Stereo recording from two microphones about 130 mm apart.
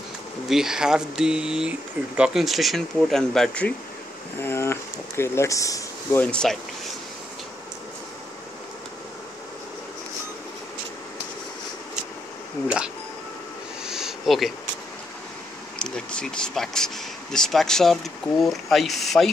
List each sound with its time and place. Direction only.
0.5 s speech: 5° right (ahead or behind)
4.4 s speech: 20° left (ahead or behind)
6.2 s speech: 5° left (ahead or behind)
12.6 s speech: 5° right (ahead or behind)
13.8 s a sound: 5° right (ahead or behind)
15.8 s speech: 5° left (ahead or behind)